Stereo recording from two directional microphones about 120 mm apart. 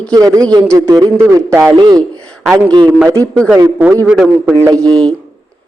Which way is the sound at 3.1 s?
25° right (ahead or behind).